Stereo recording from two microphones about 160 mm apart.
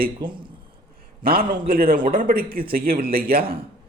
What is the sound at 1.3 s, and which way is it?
A man's voice, 65° right (ahead or behind).